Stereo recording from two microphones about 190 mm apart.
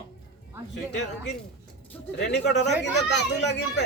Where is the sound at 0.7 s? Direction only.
65° left (ahead or behind).